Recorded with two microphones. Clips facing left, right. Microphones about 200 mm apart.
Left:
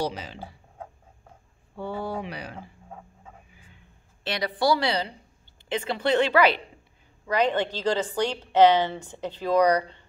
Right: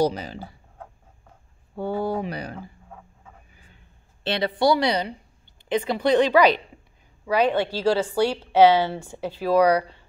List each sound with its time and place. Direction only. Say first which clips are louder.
0.0 s speech: right 7 dB; 40° right (ahead or behind)
1.8 s speech: right 6 dB; 45° right (ahead or behind)
4.2 s a woman's voice: right 4 dB; 25° right (ahead or behind); by 10.0 s 10° right (ahead or behind)